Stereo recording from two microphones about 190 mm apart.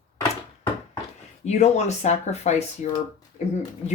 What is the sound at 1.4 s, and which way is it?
Speech, 35° left (ahead or behind).